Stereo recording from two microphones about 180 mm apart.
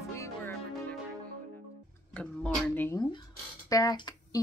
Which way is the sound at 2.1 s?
5° left (ahead or behind).